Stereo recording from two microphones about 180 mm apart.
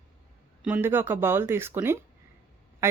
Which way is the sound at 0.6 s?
10° right (ahead or behind).